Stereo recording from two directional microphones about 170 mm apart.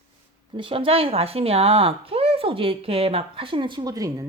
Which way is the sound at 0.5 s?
30° right (ahead or behind).